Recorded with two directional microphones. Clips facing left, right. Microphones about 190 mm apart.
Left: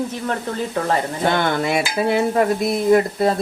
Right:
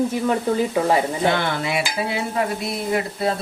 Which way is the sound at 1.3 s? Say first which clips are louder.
Left 3 dB; 45° left (ahead or behind).